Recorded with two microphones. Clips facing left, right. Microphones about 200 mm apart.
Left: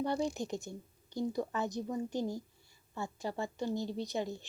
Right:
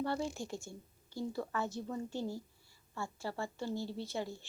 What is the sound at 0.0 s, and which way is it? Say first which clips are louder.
A woman's voice: left 3 dB; 15° left (ahead or behind).